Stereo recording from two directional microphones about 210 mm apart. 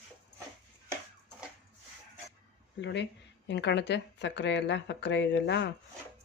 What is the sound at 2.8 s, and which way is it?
Speech, 55° left (ahead or behind).